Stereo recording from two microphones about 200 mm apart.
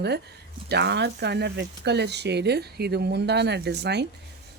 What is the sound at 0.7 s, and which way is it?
Speech, 55° right (ahead or behind).